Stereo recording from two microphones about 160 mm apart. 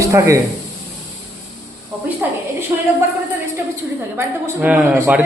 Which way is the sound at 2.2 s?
10° right (ahead or behind).